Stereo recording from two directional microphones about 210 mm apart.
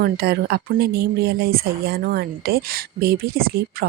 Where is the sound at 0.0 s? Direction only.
50° right (ahead or behind).